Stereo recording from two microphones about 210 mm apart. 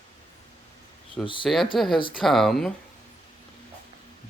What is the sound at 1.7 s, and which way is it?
Speech, centre (ahead or behind).